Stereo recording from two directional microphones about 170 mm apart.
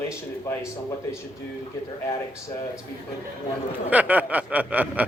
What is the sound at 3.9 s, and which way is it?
Chuckle, 10° right (ahead or behind).